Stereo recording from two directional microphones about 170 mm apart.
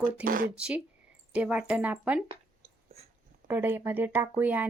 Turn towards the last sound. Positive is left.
turn(degrees=-10)  # may be behind; listen again after turning